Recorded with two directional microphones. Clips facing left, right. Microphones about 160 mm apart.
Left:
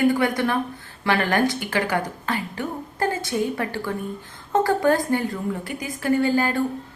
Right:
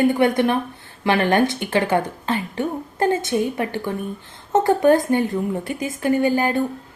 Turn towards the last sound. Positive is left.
turn(degrees=-20)  # may be behind; listen again after turning